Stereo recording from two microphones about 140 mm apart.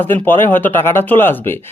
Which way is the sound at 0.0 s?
15° left (ahead or behind).